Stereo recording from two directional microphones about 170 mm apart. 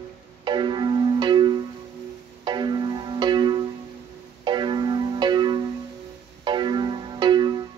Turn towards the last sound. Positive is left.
turn(degrees=-25)  # may be behind; listen again after turning